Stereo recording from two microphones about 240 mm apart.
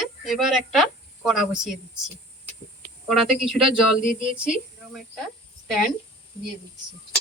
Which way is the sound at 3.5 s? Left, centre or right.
Right.